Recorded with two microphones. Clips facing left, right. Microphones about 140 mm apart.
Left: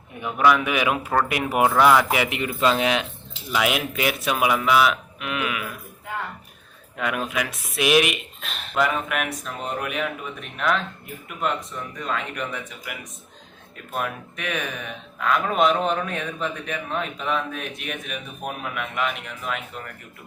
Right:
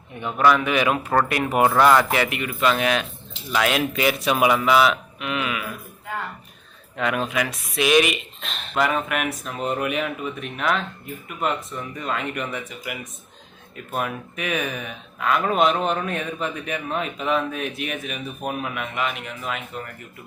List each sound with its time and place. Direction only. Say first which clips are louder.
0.2 s speech: right 1 dB; 10° left (ahead or behind)
2.3 s speech: even; 25° left (ahead or behind)
3.5 s speech: right 2 dB; 5° left (ahead or behind)
6.9 s speech: right 2 dB; 5° left (ahead or behind)